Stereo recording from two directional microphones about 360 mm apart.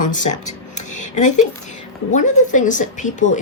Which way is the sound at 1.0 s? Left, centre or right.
Left.